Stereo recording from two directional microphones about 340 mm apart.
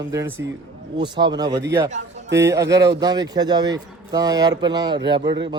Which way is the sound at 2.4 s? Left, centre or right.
Centre.